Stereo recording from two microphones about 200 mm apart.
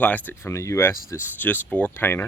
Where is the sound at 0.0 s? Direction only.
10° left (ahead or behind).